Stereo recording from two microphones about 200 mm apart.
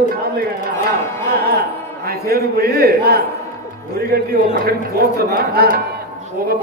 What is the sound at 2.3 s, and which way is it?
Speech, 50° right (ahead or behind).